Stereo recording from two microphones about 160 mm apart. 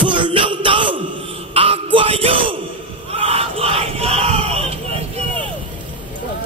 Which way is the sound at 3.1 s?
35° right (ahead or behind).